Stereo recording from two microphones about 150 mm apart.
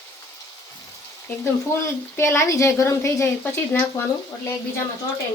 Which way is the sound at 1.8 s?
15° left (ahead or behind).